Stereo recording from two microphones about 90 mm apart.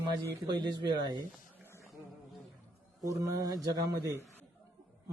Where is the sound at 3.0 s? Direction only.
35° right (ahead or behind).